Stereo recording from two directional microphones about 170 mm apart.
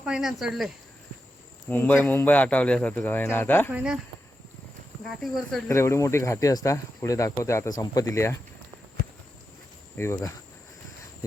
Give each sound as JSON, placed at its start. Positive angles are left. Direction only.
{"t": 0.0, "sound": "speech", "side_deg": -5}
{"t": 1.7, "sound": "speech", "side_deg": 10}
{"t": 3.7, "sound": "speech", "side_deg": -5}
{"t": 5.0, "sound": "speech", "side_deg": 0}
{"t": 5.6, "sound": "speech", "side_deg": 15}
{"t": 10.0, "sound": "speech", "side_deg": 15}